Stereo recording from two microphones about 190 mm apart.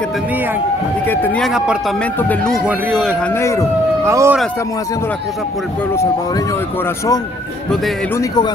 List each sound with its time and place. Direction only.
1.0 s a man's voice: 10° left (ahead or behind)
3.3 s speech: 15° left (ahead or behind)
4.0 s speech: 15° right (ahead or behind)